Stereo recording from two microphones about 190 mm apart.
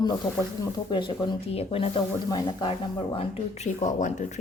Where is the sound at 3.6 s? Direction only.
40° left (ahead or behind).